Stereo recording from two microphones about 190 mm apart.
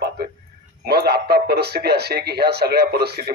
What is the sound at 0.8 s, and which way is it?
Speech, 55° right (ahead or behind).